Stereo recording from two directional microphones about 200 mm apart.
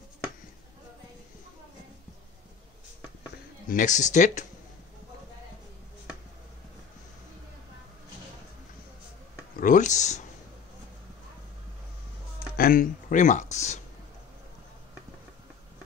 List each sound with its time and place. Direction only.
3.6 s speech: 40° left (ahead or behind)
9.6 s speech: 40° left (ahead or behind)
12.5 s speech: 45° left (ahead or behind)